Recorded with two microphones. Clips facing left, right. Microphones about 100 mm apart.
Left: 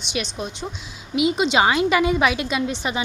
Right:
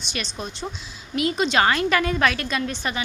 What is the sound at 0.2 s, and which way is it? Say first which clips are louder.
A woman's voice: left 3 dB; 10° left (ahead or behind).